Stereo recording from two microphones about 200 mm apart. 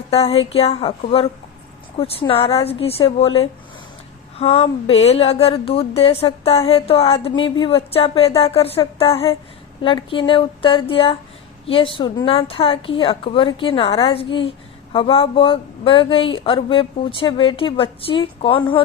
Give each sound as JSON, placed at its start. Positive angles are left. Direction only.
{"t": 0.1, "sound": "a woman's voice", "side_deg": 30}